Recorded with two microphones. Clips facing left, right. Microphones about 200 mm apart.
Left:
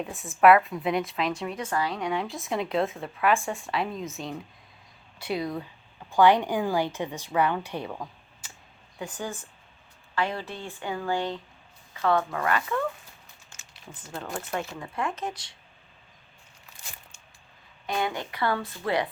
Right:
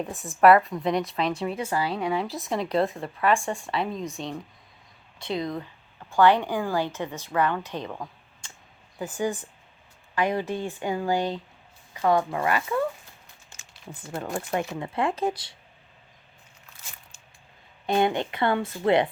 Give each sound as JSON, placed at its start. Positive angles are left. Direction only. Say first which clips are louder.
{"t": 0.0, "sound": "speech", "louder": "right 1 dB", "side_deg": 0}
{"t": 1.5, "sound": "speech", "louder": "right 2 dB", "side_deg": -30}
{"t": 2.0, "sound": "a woman's voice", "louder": "right 2 dB", "side_deg": 0}
{"t": 8.4, "sound": "a sound", "louder": "even", "side_deg": 5}
{"t": 9.0, "sound": "speech", "louder": "right 6 dB", "side_deg": -10}
{"t": 14.2, "sound": "speech", "louder": "right 4 dB", "side_deg": -15}
{"t": 14.9, "sound": "speech", "louder": "right 6 dB", "side_deg": -30}
{"t": 17.8, "sound": "speech", "louder": "right 6 dB", "side_deg": -25}